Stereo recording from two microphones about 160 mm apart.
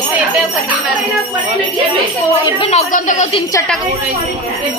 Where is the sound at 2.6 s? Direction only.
40° left (ahead or behind).